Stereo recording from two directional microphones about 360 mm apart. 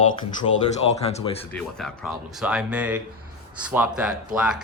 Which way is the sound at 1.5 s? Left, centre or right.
Centre.